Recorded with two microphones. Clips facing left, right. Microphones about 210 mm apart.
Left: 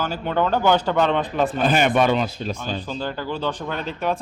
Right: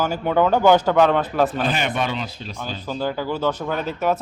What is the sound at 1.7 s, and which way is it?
A man's voice, 50° left (ahead or behind).